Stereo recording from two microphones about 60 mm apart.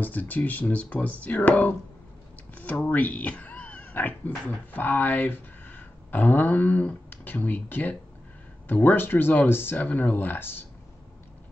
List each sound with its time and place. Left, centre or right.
0.0 s speech: left
2.5 s a sound: left
4.7 s speech: left